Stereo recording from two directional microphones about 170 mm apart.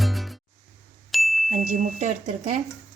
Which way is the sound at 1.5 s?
45° right (ahead or behind).